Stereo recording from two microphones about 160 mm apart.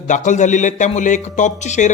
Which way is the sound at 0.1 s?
50° left (ahead or behind).